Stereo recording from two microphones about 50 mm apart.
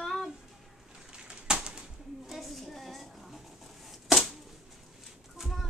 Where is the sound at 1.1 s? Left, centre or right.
Centre.